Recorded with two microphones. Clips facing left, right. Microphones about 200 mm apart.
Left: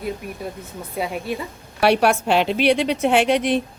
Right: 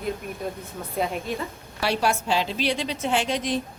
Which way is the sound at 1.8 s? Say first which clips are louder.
Left 7 dB; 65° left (ahead or behind).